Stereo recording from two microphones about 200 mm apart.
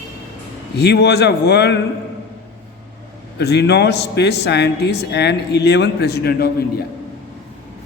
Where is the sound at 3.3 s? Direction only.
55° left (ahead or behind).